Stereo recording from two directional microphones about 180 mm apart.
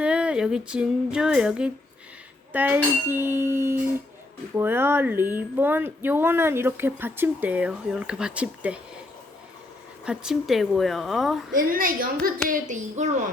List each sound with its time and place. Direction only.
0.0 s female singing: 5° right (ahead or behind)
2.5 s speech: 10° right (ahead or behind)
10.1 s speech: centre (ahead or behind)
11.5 s a woman's voice: 50° right (ahead or behind)